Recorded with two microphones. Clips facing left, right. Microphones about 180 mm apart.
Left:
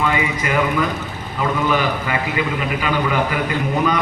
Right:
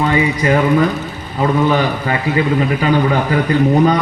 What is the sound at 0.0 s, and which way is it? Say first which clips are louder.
A man's voice: right 5 dB; 40° right (ahead or behind).